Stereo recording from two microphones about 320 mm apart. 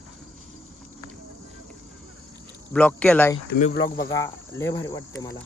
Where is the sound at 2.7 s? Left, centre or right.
Centre.